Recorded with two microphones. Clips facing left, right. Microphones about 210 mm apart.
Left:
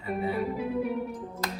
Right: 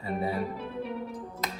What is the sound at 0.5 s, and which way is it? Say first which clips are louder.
Music: left 6 dB; 10° left (ahead or behind).